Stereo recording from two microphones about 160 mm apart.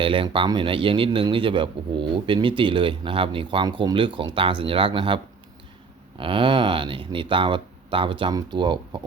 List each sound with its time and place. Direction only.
0.0 s a man's voice: 35° right (ahead or behind)